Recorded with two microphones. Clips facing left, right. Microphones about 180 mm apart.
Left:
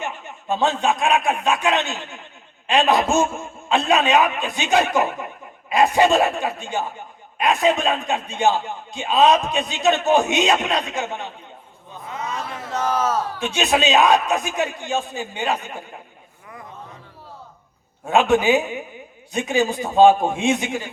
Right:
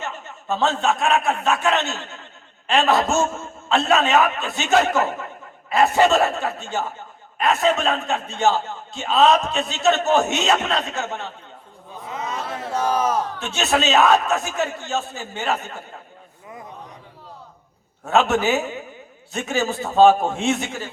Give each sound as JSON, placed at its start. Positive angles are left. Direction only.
{"t": 0.0, "sound": "a man's voice", "side_deg": 15}
{"t": 12.7, "sound": "speech", "side_deg": -10}
{"t": 13.2, "sound": "a man's voice", "side_deg": 15}
{"t": 18.0, "sound": "a man's voice", "side_deg": 15}